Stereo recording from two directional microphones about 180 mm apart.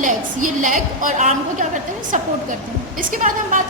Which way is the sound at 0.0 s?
45° right (ahead or behind).